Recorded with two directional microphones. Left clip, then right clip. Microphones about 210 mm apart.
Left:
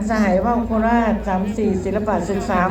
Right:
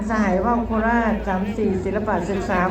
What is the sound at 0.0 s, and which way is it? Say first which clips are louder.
A woman's voice: left 3 dB; 45° left (ahead or behind).